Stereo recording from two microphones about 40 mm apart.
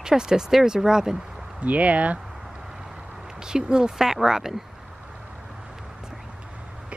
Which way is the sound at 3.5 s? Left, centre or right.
Centre.